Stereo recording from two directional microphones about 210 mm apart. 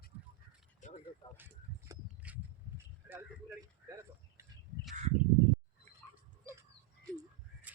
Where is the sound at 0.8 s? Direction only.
35° left (ahead or behind).